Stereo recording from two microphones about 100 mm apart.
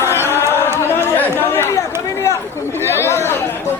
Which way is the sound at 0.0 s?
25° left (ahead or behind).